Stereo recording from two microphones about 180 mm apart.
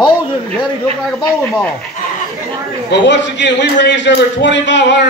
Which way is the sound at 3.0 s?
75° left (ahead or behind).